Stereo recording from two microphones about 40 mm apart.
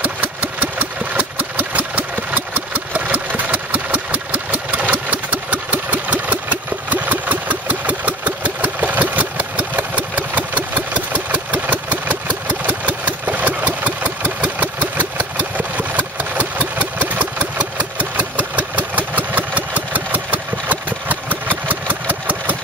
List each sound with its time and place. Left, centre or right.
0.2 s engine: right